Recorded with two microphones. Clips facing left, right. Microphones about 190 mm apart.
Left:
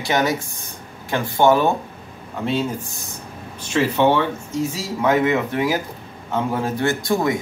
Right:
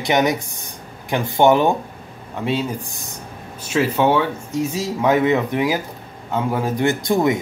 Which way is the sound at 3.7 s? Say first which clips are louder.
Even; 5° right (ahead or behind).